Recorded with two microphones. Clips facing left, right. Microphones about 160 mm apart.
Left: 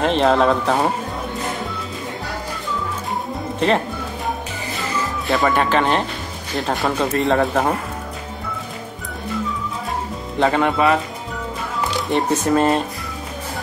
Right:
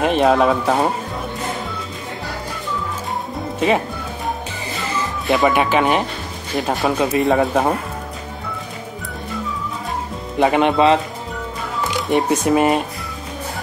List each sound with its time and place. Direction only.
0.0 s speech: 10° right (ahead or behind)
3.5 s speech: 5° right (ahead or behind)
4.7 s music: centre (ahead or behind)
5.5 s a man's voice: 10° right (ahead or behind)
10.4 s speech: 20° right (ahead or behind)
12.3 s speech: 15° right (ahead or behind)